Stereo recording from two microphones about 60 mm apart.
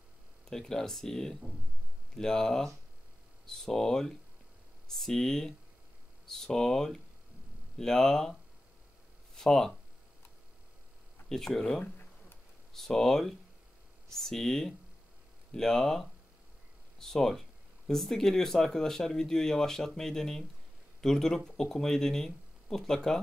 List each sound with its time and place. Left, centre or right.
0.5 s speech: centre
11.2 s speech: centre
11.8 s a sound: left
12.7 s speech: centre